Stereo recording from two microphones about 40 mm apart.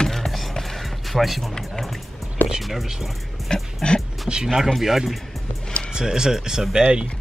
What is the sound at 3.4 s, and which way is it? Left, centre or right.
Dog, centre.